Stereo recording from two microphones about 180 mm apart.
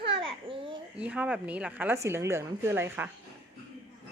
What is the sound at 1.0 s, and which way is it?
A woman's voice, 5° right (ahead or behind).